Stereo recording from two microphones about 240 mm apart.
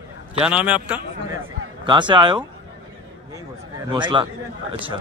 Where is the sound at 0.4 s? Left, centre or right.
Centre.